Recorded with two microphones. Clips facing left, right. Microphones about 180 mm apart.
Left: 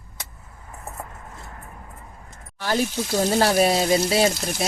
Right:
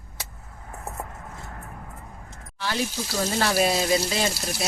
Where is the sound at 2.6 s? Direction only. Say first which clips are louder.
Left 5 dB; 45° left (ahead or behind).